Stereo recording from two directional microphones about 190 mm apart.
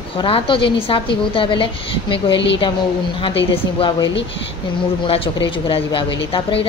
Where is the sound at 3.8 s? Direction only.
20° left (ahead or behind).